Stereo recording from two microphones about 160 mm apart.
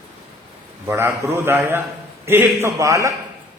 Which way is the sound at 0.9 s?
15° right (ahead or behind).